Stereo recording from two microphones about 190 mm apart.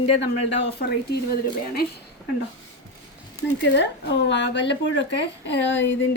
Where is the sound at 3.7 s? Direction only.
65° left (ahead or behind).